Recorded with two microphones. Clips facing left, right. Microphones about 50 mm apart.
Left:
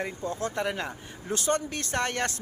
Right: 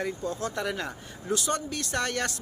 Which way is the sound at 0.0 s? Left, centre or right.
Left.